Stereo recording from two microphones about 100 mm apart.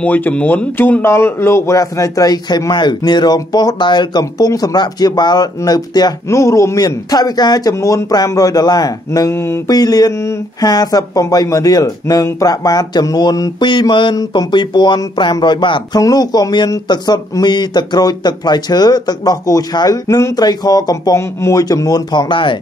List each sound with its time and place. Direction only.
0.0 s speech: 15° left (ahead or behind); by 6.1 s 45° left (ahead or behind)
6.2 s speech: 30° left (ahead or behind)
9.3 s speech: 25° left (ahead or behind)
9.7 s speech: 40° left (ahead or behind)
16.0 s speech: 40° left (ahead or behind); by 22.6 s 55° left (ahead or behind)